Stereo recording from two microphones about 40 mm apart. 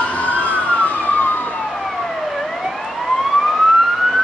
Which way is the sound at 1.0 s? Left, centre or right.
Left.